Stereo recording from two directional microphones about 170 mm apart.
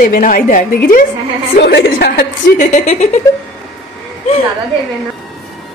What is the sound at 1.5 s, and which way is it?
Speech, 80° left.